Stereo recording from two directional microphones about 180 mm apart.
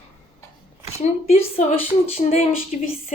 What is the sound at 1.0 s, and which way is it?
A woman's voice, 35° left (ahead or behind).